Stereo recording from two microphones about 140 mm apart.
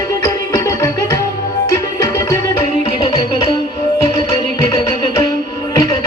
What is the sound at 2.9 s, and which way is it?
Music, 40° left (ahead or behind).